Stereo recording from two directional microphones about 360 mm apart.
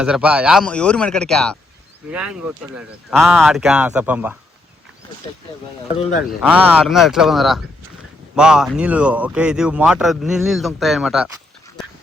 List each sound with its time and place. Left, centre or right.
0.0 s speech: centre
6.4 s speech: centre